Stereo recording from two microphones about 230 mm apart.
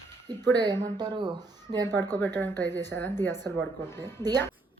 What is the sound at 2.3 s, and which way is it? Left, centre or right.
Speech, centre.